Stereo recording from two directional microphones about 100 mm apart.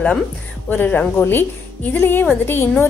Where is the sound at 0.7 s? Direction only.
20° left (ahead or behind).